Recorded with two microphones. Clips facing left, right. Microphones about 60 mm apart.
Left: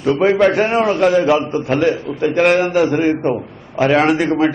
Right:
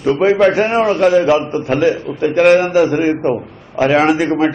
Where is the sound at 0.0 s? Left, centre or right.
Centre.